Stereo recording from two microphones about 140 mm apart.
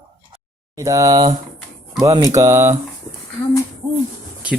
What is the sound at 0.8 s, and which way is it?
Speech, 25° right (ahead or behind).